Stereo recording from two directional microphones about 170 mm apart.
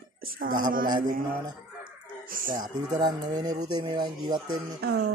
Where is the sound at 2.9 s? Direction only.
25° right (ahead or behind).